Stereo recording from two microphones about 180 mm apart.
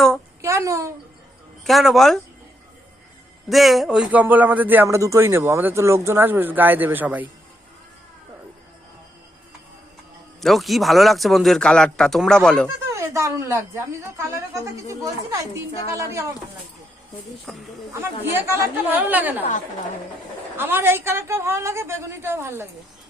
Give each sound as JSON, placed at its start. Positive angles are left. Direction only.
{"t": 0.4, "sound": "a sound", "side_deg": -15}
{"t": 1.6, "sound": "speech", "side_deg": 0}
{"t": 3.5, "sound": "a man's voice", "side_deg": 0}
{"t": 10.4, "sound": "speech", "side_deg": 0}
{"t": 12.6, "sound": "a man's voice", "side_deg": -15}
{"t": 17.4, "sound": "speech", "side_deg": 0}
{"t": 18.0, "sound": "a man's voice", "side_deg": -15}
{"t": 19.4, "sound": "a woman's voice", "side_deg": 45}
{"t": 20.6, "sound": "a man's voice", "side_deg": -10}